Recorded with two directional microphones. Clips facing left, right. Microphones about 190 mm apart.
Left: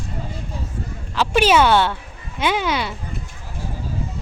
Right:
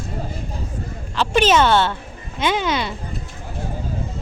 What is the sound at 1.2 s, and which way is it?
A woman's voice, 10° left (ahead or behind).